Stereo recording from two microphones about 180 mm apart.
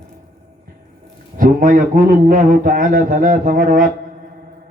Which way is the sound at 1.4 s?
50° right (ahead or behind).